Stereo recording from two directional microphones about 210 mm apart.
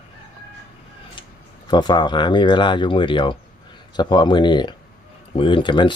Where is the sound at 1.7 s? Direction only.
20° left (ahead or behind).